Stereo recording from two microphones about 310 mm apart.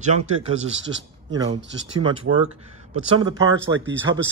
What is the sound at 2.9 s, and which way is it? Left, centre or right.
Speech, centre.